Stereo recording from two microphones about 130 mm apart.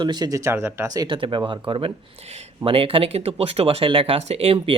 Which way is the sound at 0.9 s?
30° right (ahead or behind).